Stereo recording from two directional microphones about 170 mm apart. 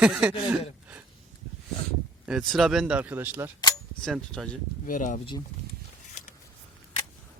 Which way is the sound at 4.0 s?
5° left (ahead or behind).